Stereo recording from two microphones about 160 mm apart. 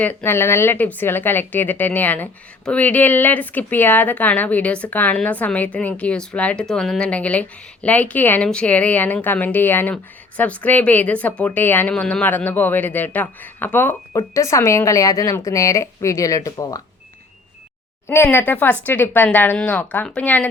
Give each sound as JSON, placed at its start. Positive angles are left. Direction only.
{"t": 0.0, "sound": "speech", "side_deg": 10}
{"t": 18.1, "sound": "speech", "side_deg": 15}